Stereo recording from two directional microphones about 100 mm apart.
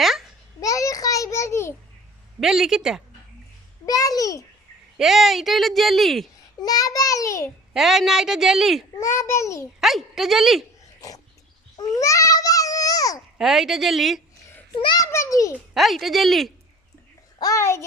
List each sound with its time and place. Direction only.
0.0 s a sound: centre (ahead or behind)
0.6 s a sound: 35° left (ahead or behind)
2.4 s speech: 5° right (ahead or behind)
3.8 s a child's voice: 40° left (ahead or behind)
4.9 s speech: 5° right (ahead or behind)
6.6 s child singing: 40° left (ahead or behind)
7.7 s speech: 5° right (ahead or behind)
9.0 s a child's voice: 30° left (ahead or behind)
9.8 s speech: centre (ahead or behind)
11.8 s babbling: 35° left (ahead or behind)
13.4 s speech: 5° right (ahead or behind)
15.0 s a sound: 30° left (ahead or behind)
15.7 s speech: centre (ahead or behind)
17.4 s a child's voice: 30° left (ahead or behind)